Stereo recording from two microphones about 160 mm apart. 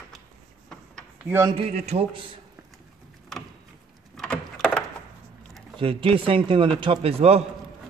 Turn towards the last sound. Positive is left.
turn(degrees=-40)  # may be behind; listen again after turning